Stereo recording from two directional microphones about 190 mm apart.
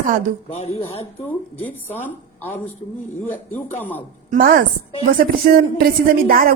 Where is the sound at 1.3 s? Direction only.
10° left (ahead or behind).